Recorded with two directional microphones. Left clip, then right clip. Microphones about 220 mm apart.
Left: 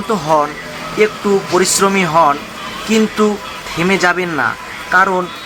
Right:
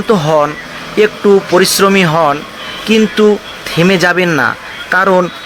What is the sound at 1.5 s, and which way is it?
Speech, 30° right (ahead or behind).